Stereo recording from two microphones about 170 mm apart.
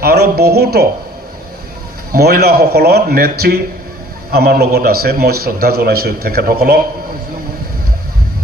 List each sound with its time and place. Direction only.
0.0 s a man's voice: 65° right (ahead or behind)
2.1 s a man's voice: 65° right (ahead or behind)